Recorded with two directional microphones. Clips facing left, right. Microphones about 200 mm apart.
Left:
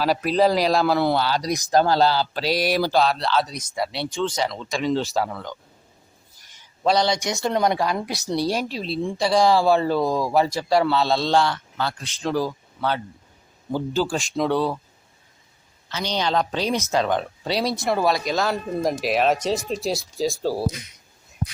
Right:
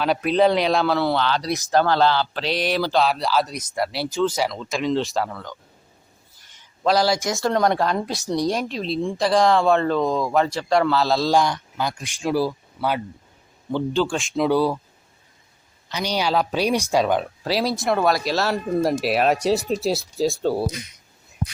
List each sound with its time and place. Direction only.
0.0 s speech: centre (ahead or behind)
0.9 s mantra: 10° left (ahead or behind)
1.7 s speech: 40° left (ahead or behind)
2.4 s mantra: 10° left (ahead or behind)
3.0 s speech: 5° right (ahead or behind)
5.3 s speech: 20° left (ahead or behind)
6.8 s speech: 5° right (ahead or behind)
11.3 s speech: 15° right (ahead or behind)
13.7 s speech: 10° left (ahead or behind); by 14.8 s 10° right (ahead or behind)
15.9 s speech: 15° right (ahead or behind)